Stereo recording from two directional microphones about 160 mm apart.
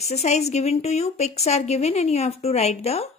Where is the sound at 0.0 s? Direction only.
45° left (ahead or behind).